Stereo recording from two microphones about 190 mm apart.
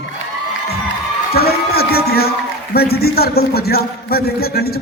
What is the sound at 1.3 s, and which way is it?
A man's voice, 55° left (ahead or behind).